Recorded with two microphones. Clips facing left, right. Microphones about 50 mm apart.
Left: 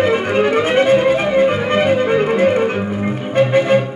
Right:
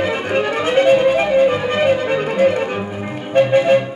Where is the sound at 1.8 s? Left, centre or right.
Centre.